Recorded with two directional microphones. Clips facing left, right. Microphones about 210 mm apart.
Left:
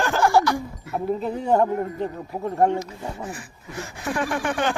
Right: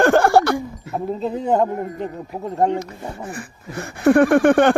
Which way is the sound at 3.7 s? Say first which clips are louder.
Right 13 dB; 60° right (ahead or behind).